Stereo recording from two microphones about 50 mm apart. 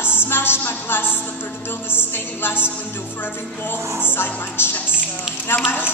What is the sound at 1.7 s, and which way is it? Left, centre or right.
Music, left.